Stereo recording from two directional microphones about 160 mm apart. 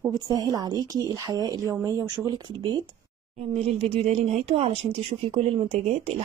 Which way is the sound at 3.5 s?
40° right (ahead or behind).